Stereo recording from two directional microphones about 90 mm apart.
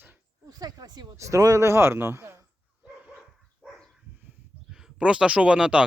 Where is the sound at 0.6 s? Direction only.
50° right (ahead or behind).